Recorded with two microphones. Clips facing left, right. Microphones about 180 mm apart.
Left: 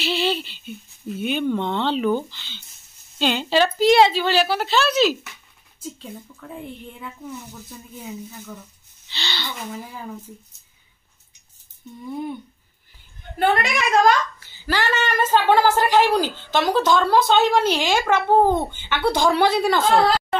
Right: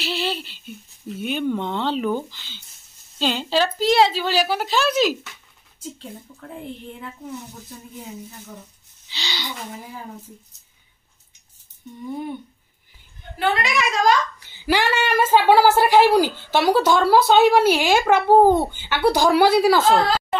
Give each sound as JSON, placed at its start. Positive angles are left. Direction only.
{"t": 0.0, "sound": "a sound", "side_deg": -5}
{"t": 1.0, "sound": "a woman's voice", "side_deg": 0}
{"t": 9.1, "sound": "a woman's voice", "side_deg": -10}
{"t": 13.4, "sound": "a woman's voice", "side_deg": 50}
{"t": 14.4, "sound": "a woman's voice", "side_deg": -15}